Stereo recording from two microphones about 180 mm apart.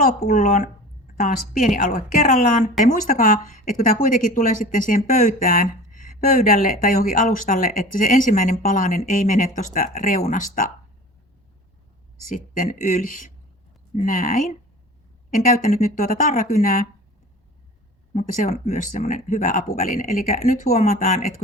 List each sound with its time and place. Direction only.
0.0 s speech: 55° left (ahead or behind)
12.3 s speech: 50° left (ahead or behind)
18.1 s speech: 40° left (ahead or behind)